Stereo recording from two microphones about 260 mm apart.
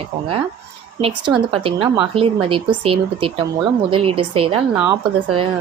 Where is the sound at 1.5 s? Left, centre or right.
Right.